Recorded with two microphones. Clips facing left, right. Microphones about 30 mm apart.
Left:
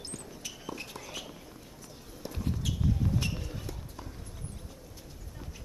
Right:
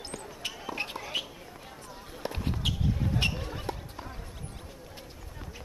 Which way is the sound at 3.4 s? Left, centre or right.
Right.